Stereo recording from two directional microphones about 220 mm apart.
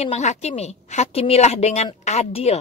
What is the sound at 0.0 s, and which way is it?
A woman's voice, 30° left (ahead or behind).